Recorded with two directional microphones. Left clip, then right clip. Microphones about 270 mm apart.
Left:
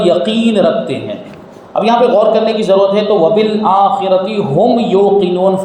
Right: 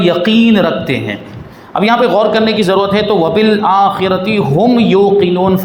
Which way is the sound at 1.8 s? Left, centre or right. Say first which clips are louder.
Left 1 dB; right.